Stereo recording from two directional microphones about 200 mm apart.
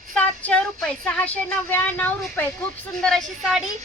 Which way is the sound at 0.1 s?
5° left (ahead or behind).